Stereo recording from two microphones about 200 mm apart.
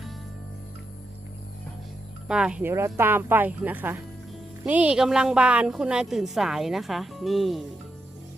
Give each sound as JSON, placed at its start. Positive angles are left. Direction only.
{"t": 2.2, "sound": "a woman's voice", "side_deg": -5}